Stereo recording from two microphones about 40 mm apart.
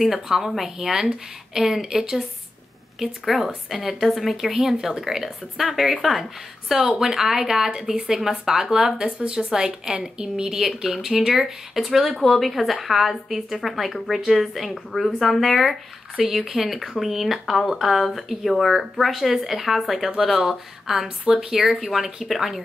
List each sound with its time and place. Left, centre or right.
0.0 s speech: centre
7.0 s a woman's voice: centre
10.7 s speech: centre
15.6 s speech: centre
21.3 s a woman's voice: centre
21.5 s speech: centre